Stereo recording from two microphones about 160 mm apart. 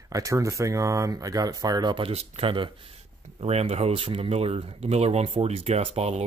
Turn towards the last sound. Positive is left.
turn(degrees=-40)  # may be behind; listen again after turning